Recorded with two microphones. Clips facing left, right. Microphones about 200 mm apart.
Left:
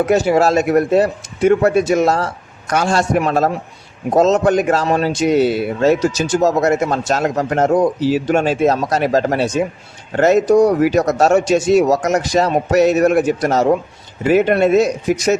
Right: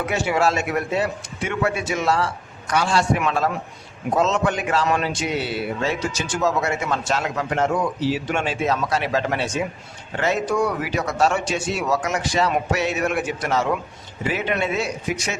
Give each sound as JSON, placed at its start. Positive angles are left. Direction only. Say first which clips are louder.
{"t": 0.0, "sound": "speech", "louder": "left 8 dB", "side_deg": 40}